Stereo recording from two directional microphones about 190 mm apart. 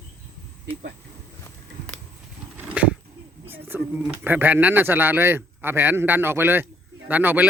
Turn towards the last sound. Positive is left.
turn(degrees=-10)  # may be behind; listen again after turning